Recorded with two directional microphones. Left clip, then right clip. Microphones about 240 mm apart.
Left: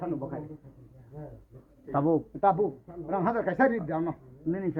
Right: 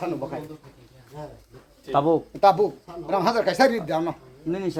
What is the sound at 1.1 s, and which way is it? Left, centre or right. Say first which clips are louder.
Speech: right 7 dB; centre.